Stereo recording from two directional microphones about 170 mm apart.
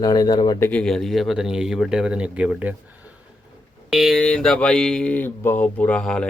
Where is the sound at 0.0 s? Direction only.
25° left (ahead or behind).